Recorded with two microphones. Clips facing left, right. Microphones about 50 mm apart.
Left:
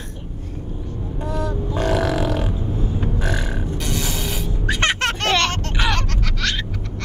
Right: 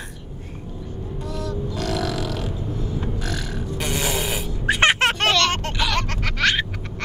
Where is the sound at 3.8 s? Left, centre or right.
Right.